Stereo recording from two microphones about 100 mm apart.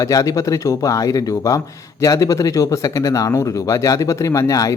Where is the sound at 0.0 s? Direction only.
30° left (ahead or behind).